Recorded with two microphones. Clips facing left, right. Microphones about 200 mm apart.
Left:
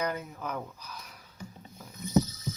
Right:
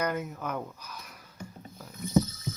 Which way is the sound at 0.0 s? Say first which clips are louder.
Right 2 dB; 5° right (ahead or behind).